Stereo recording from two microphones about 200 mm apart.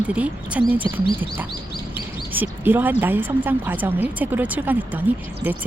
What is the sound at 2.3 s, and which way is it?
Speech, 10° right (ahead or behind).